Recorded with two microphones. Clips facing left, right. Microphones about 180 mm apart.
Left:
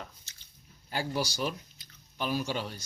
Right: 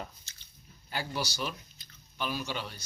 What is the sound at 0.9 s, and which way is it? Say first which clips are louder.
Speech: left 3 dB; 45° left (ahead or behind).